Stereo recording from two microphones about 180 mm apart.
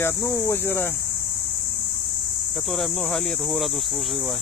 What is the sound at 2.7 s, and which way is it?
Speech, centre (ahead or behind).